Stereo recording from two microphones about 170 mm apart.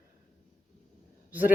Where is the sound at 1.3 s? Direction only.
10° right (ahead or behind).